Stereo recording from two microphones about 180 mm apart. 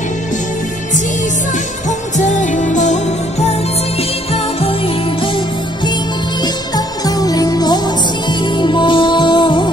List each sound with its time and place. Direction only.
1.9 s music: 45° left (ahead or behind)
6.4 s music: 20° left (ahead or behind)